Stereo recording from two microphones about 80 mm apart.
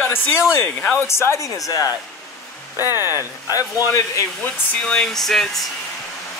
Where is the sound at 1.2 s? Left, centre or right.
Left.